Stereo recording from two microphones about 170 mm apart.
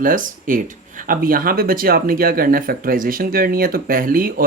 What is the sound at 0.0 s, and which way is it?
Speech, 55° right (ahead or behind).